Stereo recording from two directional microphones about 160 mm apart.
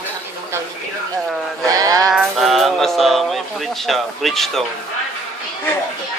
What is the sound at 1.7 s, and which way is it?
Music, 20° right (ahead or behind).